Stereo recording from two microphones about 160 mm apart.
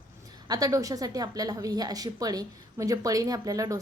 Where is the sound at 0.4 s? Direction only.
25° right (ahead or behind).